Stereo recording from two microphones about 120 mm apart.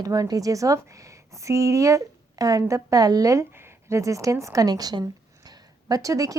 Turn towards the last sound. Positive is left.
turn(degrees=-30)  # may be behind; listen again after turning